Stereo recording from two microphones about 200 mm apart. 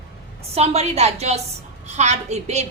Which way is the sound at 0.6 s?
30° right (ahead or behind).